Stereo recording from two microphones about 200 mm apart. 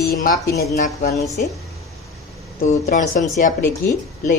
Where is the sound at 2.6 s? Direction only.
40° left (ahead or behind).